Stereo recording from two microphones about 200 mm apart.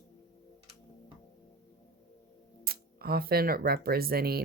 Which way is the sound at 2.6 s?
50° right (ahead or behind).